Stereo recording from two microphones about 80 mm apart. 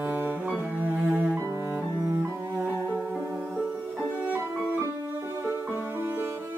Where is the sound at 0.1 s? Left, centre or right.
Right.